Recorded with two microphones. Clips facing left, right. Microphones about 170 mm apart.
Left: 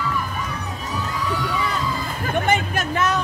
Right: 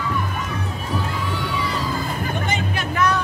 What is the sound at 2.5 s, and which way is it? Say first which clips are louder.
Vehicle: left 4 dB; 55° left (ahead or behind).